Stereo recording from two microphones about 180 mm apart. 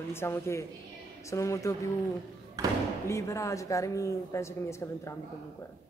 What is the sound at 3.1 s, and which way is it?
Speech, 15° left (ahead or behind).